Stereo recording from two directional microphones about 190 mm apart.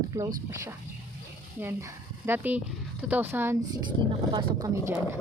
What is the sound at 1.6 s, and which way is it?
Speech, 15° right (ahead or behind).